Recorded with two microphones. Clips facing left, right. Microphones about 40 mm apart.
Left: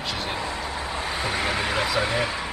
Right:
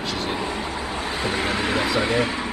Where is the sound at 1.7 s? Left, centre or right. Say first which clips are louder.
Right 4 dB; centre.